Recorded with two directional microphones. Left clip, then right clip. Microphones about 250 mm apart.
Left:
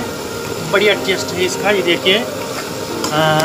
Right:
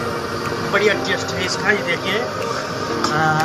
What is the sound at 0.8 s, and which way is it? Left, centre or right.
Speech, left.